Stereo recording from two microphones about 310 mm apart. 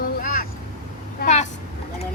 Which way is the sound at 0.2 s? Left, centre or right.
Left.